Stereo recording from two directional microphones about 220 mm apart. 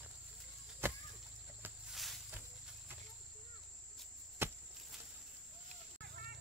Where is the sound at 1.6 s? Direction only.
Centre (ahead or behind).